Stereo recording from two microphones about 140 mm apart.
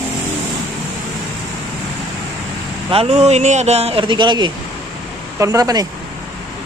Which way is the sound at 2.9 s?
50° right (ahead or behind).